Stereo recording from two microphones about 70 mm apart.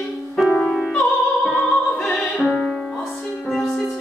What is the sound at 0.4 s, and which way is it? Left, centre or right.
Music, centre.